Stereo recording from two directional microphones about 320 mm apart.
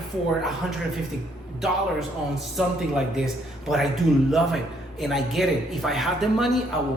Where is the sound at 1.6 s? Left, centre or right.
Centre.